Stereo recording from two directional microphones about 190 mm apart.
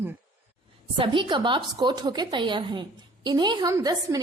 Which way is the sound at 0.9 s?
25° right (ahead or behind).